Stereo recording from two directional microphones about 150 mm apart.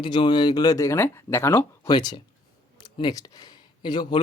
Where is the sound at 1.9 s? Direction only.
30° left (ahead or behind).